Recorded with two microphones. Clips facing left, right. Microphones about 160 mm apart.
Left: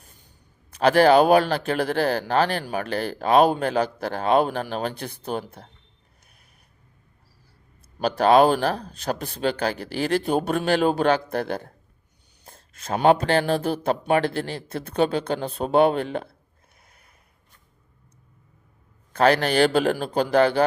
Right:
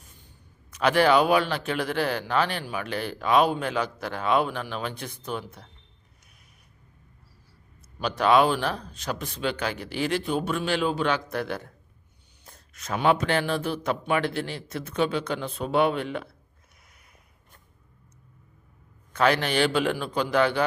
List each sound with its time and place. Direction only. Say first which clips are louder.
0.7 s a man's voice: left 4 dB; 35° left (ahead or behind)
7.9 s a man's voice: left 4 dB; 40° left (ahead or behind)
19.1 s a man's voice: left 4 dB; 35° left (ahead or behind)